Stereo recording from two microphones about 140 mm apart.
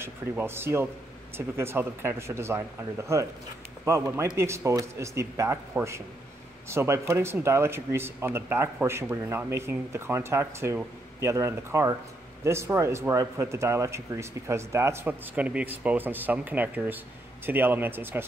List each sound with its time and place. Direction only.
0.0 s speech: 15° right (ahead or behind)